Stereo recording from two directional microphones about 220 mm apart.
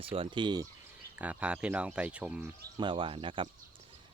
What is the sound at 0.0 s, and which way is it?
Speech, 25° right (ahead or behind).